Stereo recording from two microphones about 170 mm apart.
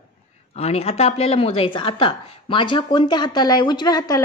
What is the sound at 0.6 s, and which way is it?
A woman's voice, 35° left (ahead or behind).